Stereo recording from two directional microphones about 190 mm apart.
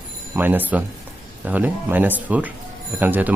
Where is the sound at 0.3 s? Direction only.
10° right (ahead or behind).